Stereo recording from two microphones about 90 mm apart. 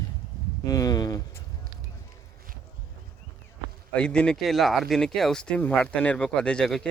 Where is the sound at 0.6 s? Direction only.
45° left (ahead or behind).